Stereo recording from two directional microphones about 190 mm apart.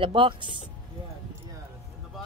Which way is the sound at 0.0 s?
25° right (ahead or behind).